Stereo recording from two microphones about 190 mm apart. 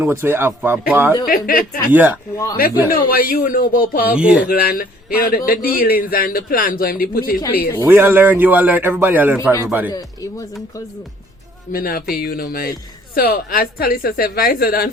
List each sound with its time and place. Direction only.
0.0 s a man's voice: 10° right (ahead or behind)
1.3 s a man's voice: 50° left (ahead or behind)
1.9 s a man's voice: 10° right (ahead or behind)
2.6 s a man's voice: 50° left (ahead or behind)
4.1 s speech: 5° right (ahead or behind)
4.4 s a man's voice: 50° left (ahead or behind)
7.8 s a man's voice: 10° right (ahead or behind)
9.9 s speech: 20° left (ahead or behind)
11.7 s a man's voice: 50° left (ahead or behind)